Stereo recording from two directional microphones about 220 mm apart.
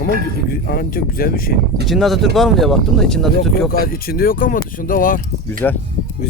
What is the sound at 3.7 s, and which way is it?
Speech, 45° left (ahead or behind).